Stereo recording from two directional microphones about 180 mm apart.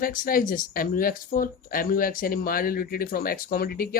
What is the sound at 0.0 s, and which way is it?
Speech, 50° left (ahead or behind).